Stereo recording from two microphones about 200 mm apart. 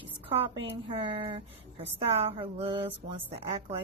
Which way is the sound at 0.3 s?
25° right (ahead or behind).